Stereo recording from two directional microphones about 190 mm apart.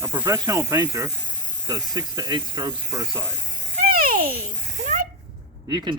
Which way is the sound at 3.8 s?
50° right (ahead or behind).